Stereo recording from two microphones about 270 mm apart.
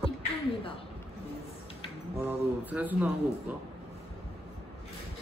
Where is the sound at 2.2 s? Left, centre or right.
Centre.